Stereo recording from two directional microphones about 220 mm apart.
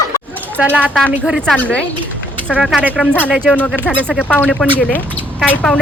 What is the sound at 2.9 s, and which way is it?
Speech, 10° left (ahead or behind).